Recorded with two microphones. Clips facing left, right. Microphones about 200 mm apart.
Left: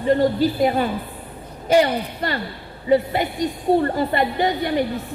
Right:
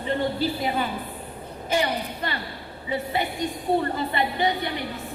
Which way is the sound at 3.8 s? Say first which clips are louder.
Left 6 dB; 45° left (ahead or behind).